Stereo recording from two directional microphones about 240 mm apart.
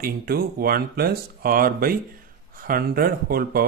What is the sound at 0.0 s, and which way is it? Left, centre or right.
Speech, right.